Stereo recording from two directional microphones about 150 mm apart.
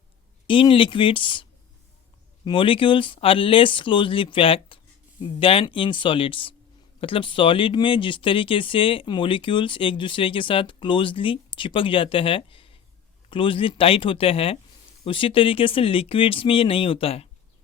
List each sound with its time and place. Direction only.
0.4 s speech: 35° left (ahead or behind)